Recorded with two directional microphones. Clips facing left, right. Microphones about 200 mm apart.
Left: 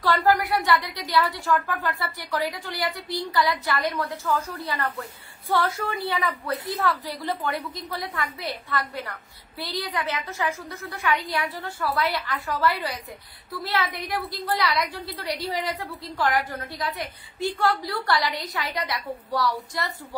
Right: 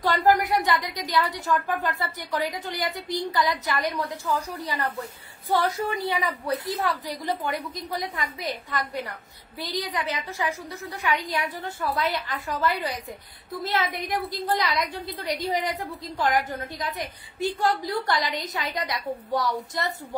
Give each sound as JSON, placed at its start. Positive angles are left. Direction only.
{"t": 0.0, "sound": "a woman's voice", "side_deg": -20}
{"t": 16.7, "sound": "a woman's voice", "side_deg": -45}
{"t": 17.4, "sound": "a woman's voice", "side_deg": -15}